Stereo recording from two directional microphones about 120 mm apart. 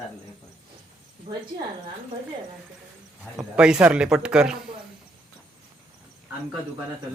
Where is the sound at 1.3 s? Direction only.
40° right (ahead or behind).